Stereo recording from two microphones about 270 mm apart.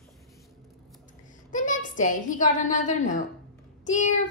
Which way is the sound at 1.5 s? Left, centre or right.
Left.